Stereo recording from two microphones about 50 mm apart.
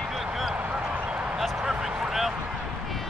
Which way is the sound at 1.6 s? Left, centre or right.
Centre.